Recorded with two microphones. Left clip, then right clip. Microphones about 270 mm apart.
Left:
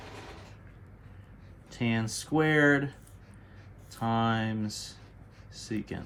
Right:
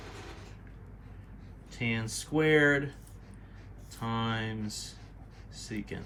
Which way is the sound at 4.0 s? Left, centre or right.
Centre.